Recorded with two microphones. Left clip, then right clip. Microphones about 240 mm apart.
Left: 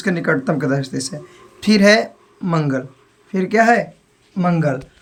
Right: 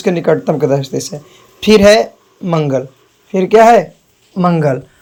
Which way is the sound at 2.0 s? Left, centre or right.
Left.